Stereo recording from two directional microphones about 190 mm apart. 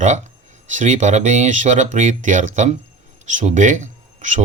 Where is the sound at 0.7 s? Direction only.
40° right (ahead or behind).